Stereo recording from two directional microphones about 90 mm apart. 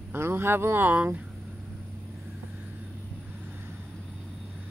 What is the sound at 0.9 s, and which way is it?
Speech, 15° right (ahead or behind).